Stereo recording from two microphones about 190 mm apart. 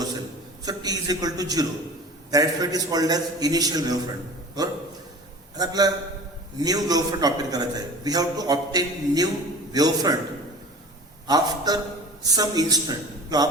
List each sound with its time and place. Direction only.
0.6 s a man's voice: 20° right (ahead or behind)
11.3 s a man's voice: 20° right (ahead or behind)